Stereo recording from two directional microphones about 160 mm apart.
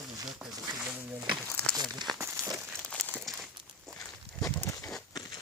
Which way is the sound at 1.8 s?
25° right (ahead or behind).